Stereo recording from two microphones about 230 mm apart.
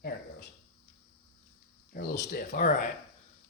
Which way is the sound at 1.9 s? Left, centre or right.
Left.